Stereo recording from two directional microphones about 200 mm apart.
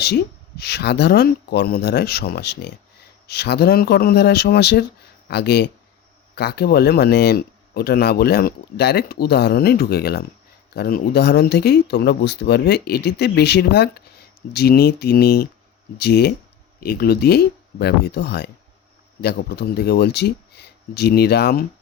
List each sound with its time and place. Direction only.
0.0 s speech: 55° left (ahead or behind)